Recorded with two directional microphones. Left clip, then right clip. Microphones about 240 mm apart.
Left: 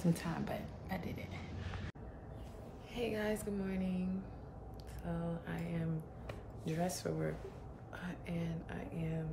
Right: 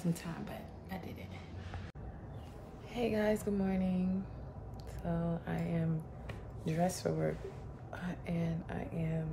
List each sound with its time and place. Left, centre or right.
0.0 s speech: centre
2.9 s speech: centre
5.0 s a sound: centre
6.6 s speech: centre